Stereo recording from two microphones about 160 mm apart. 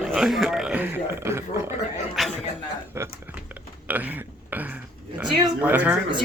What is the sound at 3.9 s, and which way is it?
Speech, 10° right (ahead or behind).